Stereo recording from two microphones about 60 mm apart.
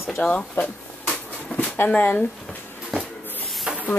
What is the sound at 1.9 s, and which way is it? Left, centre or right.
Speech, left.